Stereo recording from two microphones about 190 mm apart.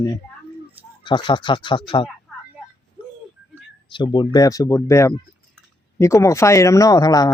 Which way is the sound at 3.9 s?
25° left (ahead or behind).